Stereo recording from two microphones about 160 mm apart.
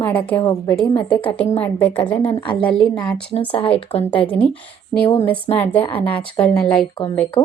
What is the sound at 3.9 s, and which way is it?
Speech, 35° left (ahead or behind).